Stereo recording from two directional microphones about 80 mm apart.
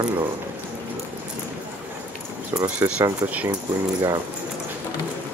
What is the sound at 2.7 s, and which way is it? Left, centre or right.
Speech, centre.